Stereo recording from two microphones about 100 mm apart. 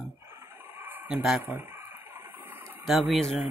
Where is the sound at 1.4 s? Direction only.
20° right (ahead or behind).